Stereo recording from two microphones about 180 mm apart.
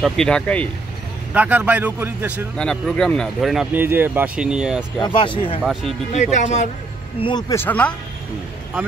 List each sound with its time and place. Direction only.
0.0 s speech: 5° left (ahead or behind)
1.3 s a man's voice: 10° right (ahead or behind)
2.5 s speech: 5° left (ahead or behind)
5.0 s speech: 25° left (ahead or behind)
5.6 s speech: centre (ahead or behind)
6.3 s a man's voice: 40° left (ahead or behind)
7.2 s speech: 25° left (ahead or behind); by 7.9 s 10° left (ahead or behind)